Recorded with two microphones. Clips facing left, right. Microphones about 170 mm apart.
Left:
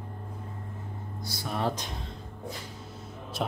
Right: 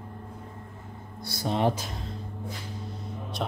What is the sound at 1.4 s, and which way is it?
Speech, 20° right (ahead or behind).